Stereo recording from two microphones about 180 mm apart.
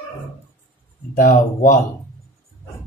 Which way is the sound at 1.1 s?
45° left (ahead or behind).